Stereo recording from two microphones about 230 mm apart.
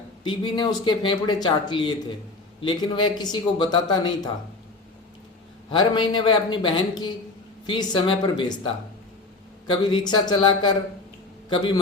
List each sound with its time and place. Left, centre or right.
0.3 s speech: centre
5.7 s a man's voice: centre